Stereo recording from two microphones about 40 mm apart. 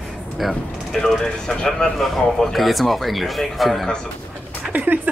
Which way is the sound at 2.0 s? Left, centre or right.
Centre.